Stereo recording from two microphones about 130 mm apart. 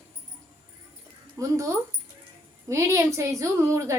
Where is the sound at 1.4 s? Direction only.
25° right (ahead or behind).